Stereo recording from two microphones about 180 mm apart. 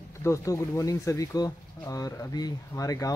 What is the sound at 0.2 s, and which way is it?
Speech, 15° left (ahead or behind).